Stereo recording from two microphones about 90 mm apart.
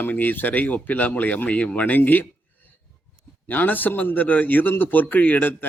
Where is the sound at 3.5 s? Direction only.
20° left (ahead or behind).